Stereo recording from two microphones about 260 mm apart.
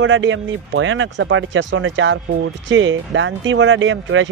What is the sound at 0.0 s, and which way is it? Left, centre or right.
Speech, right.